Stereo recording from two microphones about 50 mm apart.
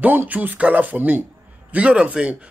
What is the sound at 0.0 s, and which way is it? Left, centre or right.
Speech, right.